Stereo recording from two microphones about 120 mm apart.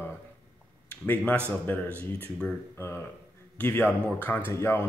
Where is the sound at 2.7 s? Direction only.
20° left (ahead or behind).